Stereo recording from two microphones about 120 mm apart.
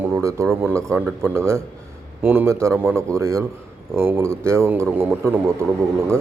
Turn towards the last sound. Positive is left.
turn(degrees=-20)  # may be behind; listen again after turning